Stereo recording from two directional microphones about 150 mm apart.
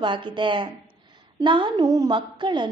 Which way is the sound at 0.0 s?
30° right (ahead or behind).